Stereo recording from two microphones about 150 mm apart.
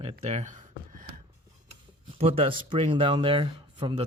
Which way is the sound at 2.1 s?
40° right (ahead or behind).